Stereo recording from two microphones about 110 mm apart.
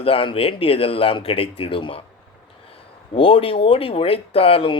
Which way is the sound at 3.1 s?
55° left (ahead or behind).